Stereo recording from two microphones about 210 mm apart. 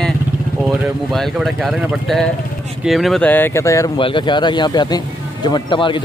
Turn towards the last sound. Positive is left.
turn(degrees=25)  # may be behind; listen again after turning